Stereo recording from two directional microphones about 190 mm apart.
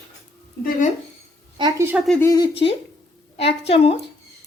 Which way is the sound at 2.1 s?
15° left (ahead or behind).